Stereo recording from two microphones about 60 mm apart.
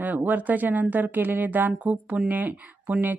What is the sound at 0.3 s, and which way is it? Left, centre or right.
Speech, right.